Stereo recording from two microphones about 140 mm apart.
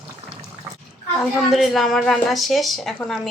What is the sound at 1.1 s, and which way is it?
A woman's voice, centre (ahead or behind).